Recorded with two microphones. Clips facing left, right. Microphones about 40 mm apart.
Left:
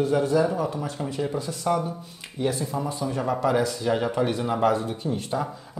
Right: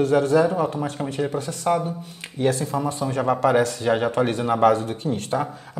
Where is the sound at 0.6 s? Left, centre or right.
Right.